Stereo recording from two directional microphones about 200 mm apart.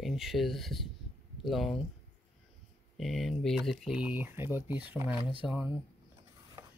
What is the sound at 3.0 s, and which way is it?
Speech, centre (ahead or behind).